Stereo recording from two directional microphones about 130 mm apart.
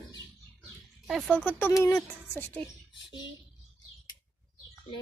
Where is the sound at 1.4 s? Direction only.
15° left (ahead or behind).